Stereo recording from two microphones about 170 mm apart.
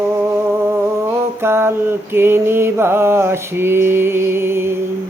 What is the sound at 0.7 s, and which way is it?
Mantra, 15° right (ahead or behind).